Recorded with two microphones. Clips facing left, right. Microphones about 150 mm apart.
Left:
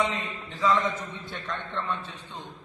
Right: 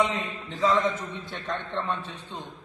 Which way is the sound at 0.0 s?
20° right (ahead or behind).